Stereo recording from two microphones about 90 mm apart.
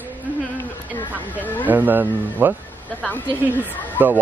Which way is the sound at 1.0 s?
20° left (ahead or behind).